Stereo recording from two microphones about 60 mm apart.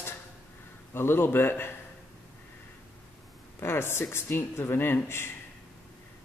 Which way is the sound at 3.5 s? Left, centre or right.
Left.